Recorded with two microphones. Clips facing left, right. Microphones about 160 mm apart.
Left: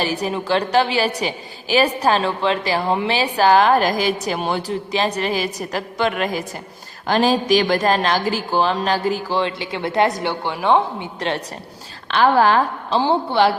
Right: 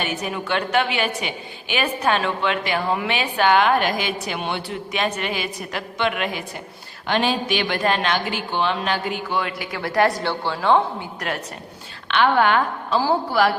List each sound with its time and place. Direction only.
0.0 s a woman's voice: 35° left (ahead or behind)
12.0 s a woman's voice: 35° left (ahead or behind)